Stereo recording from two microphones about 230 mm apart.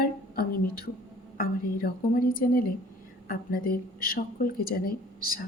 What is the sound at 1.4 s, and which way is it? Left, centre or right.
Speech, left.